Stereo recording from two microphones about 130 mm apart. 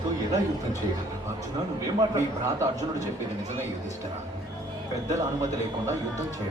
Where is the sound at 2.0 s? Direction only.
25° right (ahead or behind).